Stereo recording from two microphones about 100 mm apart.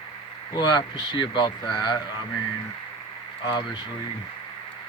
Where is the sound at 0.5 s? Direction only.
45° left (ahead or behind).